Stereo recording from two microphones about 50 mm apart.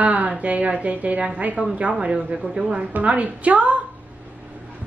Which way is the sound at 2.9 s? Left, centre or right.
Right.